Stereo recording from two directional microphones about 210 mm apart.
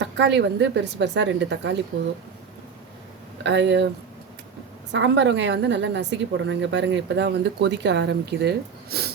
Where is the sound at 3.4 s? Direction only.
55° right (ahead or behind).